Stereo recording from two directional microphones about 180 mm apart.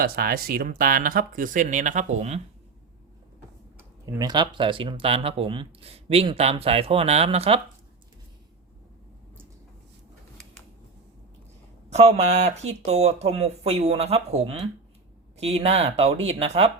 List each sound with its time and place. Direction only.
0.0 s speech: 55° right (ahead or behind); by 2.4 s 40° right (ahead or behind)
3.8 s speech: 15° right (ahead or behind); by 7.6 s 30° right (ahead or behind)
11.9 s speech: 35° right (ahead or behind)